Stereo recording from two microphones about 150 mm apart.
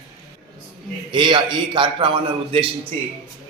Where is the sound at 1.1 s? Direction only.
30° right (ahead or behind).